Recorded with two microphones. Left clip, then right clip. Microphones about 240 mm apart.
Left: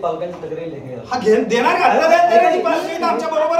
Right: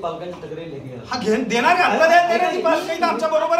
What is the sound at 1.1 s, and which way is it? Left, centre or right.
A man's voice, centre.